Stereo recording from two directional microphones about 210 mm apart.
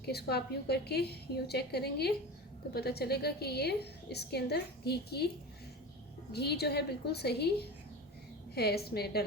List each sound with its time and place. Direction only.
0.0 s a woman's voice: 50° left (ahead or behind)
6.3 s a woman's voice: 50° left (ahead or behind)
8.5 s a woman's voice: 50° left (ahead or behind)